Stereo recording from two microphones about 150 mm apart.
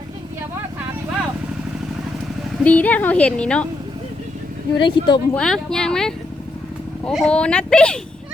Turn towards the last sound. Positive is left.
turn(degrees=5)  # may be behind; listen again after turning